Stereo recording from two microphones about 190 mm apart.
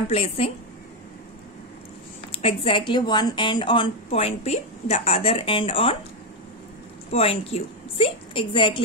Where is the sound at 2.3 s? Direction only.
30° left (ahead or behind).